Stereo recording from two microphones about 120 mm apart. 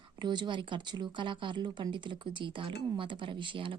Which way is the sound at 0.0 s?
40° right (ahead or behind).